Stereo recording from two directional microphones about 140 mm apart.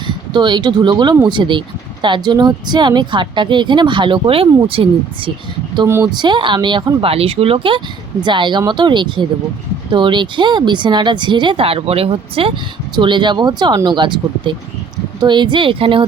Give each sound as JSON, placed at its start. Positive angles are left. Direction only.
{"t": 0.3, "sound": "speech", "side_deg": -30}